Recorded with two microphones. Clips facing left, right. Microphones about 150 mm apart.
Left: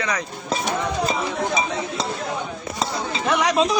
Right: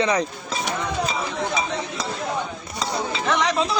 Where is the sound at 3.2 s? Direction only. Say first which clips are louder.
Left 3 dB; 10° left (ahead or behind).